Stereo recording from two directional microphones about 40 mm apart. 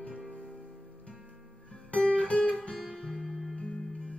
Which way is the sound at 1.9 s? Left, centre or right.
Left.